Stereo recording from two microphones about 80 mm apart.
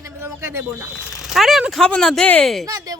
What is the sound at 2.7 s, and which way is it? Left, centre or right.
Speech, right.